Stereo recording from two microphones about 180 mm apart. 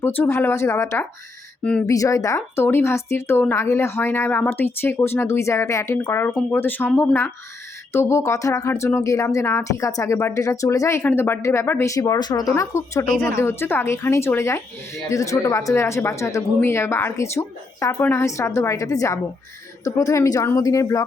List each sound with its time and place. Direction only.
0.0 s speech: 15° left (ahead or behind)